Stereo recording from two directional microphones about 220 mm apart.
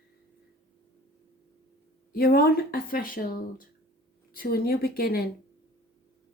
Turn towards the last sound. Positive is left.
turn(degrees=45)  # may be behind; listen again after turning